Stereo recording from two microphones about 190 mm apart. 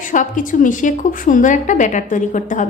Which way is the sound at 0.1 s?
45° left (ahead or behind).